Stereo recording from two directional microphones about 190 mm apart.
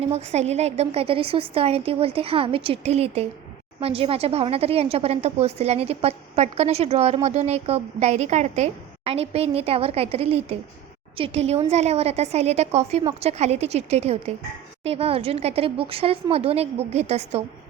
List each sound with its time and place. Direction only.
0.0 s a woman's voice: 35° right (ahead or behind)